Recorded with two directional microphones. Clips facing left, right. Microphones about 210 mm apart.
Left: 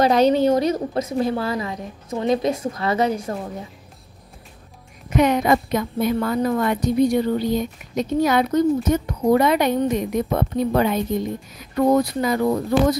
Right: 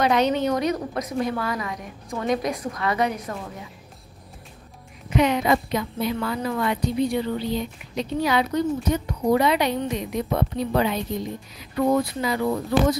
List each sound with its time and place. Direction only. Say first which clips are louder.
0.0 s a woman's voice: left 5 dB; 35° left (ahead or behind)
5.1 s a woman's voice: left 3 dB; 45° left (ahead or behind)